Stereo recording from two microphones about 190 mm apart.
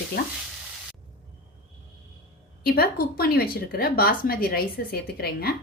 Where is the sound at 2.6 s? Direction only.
55° left (ahead or behind).